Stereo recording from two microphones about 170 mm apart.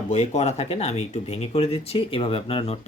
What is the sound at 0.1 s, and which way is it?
Speech, 40° left (ahead or behind).